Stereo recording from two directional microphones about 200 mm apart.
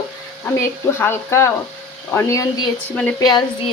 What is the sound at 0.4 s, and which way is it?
Speech, 10° left (ahead or behind).